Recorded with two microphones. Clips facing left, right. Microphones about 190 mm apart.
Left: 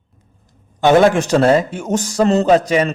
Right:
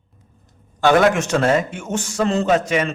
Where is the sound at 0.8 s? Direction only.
25° left (ahead or behind).